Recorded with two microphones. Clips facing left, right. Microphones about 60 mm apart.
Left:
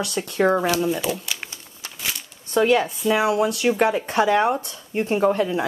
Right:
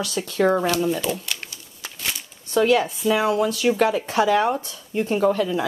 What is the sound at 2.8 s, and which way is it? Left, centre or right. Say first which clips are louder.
Speech: even; centre.